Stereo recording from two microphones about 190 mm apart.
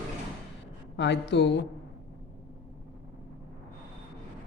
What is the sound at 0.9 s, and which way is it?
Speech, 65° left (ahead or behind).